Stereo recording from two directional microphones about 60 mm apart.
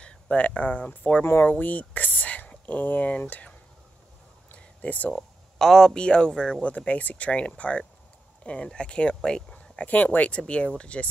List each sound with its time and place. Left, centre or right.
0.0 s speech: centre
1.2 s speech: left
1.5 s speech: left
4.5 s a sound: left
5.1 s speech: centre
6.6 s speech: left
9.8 s speech: left